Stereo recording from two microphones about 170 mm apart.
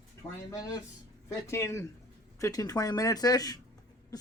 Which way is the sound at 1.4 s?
15° left (ahead or behind).